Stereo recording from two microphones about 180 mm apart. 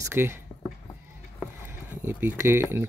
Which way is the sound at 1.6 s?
10° right (ahead or behind).